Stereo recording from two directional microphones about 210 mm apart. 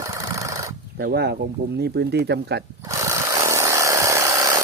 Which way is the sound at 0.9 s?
50° right (ahead or behind).